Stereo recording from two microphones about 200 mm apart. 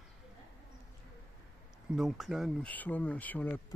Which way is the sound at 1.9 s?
Centre (ahead or behind).